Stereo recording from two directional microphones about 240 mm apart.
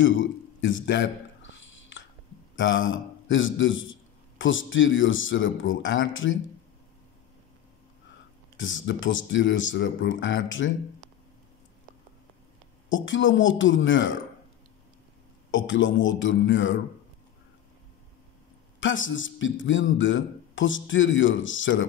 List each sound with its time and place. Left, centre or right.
0.0 s a man's voice: left
2.5 s a man's voice: left
8.5 s a man's voice: left
12.9 s a man's voice: left
15.5 s a man's voice: left
18.8 s a man's voice: left